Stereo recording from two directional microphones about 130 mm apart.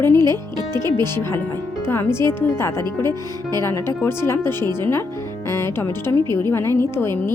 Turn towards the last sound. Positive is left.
turn(degrees=20)  # may be behind; listen again after turning